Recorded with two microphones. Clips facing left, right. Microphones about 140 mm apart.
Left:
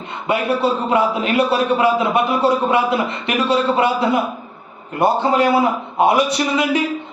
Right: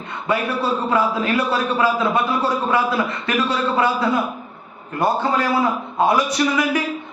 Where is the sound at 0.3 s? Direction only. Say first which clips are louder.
Left 3 dB; 20° left (ahead or behind).